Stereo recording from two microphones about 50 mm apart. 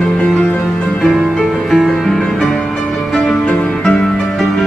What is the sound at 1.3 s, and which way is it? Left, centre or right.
Music, centre.